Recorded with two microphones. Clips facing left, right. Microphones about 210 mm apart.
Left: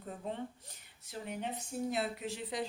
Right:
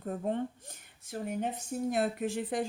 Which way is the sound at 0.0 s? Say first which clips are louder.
Right 8 dB; 55° right (ahead or behind).